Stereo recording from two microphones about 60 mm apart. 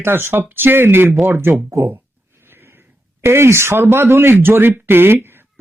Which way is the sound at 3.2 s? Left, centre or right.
Right.